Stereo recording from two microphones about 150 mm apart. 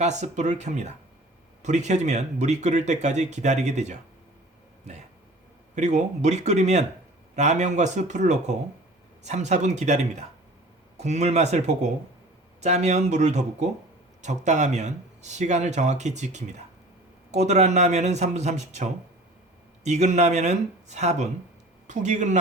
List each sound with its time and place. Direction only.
0.0 s speech: 50° right (ahead or behind)
5.7 s speech: 50° right (ahead or behind)